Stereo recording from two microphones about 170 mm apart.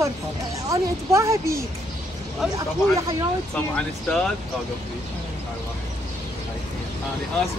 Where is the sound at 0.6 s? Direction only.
20° right (ahead or behind).